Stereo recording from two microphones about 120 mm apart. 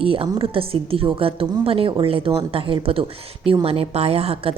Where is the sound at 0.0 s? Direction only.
50° right (ahead or behind).